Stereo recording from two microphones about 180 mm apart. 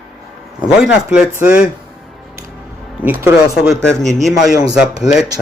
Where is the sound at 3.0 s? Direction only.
10° right (ahead or behind).